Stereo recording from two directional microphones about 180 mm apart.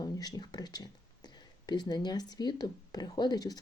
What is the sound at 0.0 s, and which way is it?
Speech, 20° left (ahead or behind).